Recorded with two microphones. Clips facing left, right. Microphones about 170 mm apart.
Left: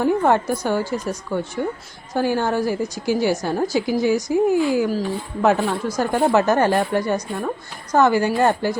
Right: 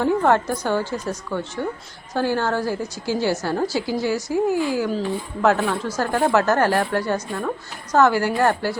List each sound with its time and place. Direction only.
0.0 s a woman's voice: 10° left (ahead or behind)